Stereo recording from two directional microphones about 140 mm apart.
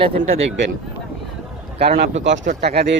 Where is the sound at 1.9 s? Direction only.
55° right (ahead or behind).